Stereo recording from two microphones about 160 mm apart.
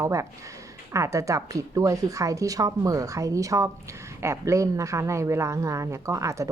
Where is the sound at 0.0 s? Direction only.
20° right (ahead or behind).